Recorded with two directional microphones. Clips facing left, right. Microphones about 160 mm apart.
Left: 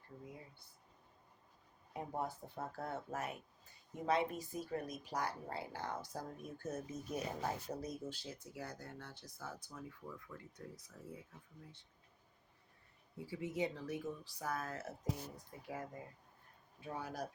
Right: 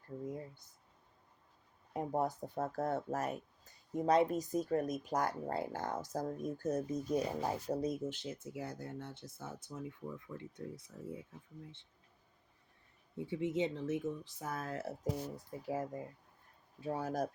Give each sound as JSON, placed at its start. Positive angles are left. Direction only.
{"t": 0.3, "sound": "speech", "side_deg": -45}
{"t": 1.9, "sound": "speech", "side_deg": -45}
{"t": 13.1, "sound": "speech", "side_deg": -25}